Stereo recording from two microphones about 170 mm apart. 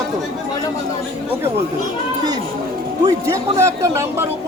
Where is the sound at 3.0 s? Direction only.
15° right (ahead or behind).